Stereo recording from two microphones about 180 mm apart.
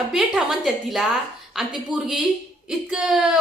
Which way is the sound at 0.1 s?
5° right (ahead or behind).